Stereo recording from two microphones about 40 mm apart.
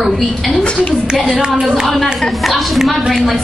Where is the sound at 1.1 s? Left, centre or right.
Centre.